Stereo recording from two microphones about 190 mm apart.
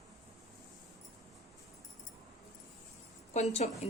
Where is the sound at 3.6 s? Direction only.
35° left (ahead or behind).